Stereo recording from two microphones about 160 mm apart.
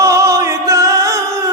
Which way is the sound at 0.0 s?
20° right (ahead or behind).